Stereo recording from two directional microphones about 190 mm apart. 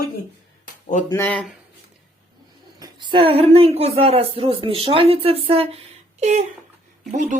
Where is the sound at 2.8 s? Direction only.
25° right (ahead or behind).